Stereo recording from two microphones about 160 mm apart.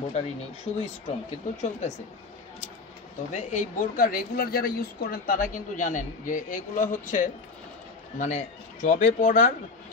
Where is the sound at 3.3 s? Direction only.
50° left (ahead or behind).